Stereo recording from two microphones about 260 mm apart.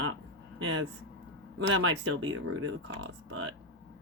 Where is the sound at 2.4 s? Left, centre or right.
Right.